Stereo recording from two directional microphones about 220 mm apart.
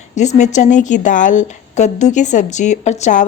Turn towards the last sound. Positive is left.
turn(degrees=30)  # may be behind; listen again after turning